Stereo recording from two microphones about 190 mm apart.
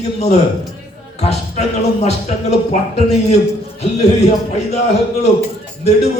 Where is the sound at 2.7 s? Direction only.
35° left (ahead or behind).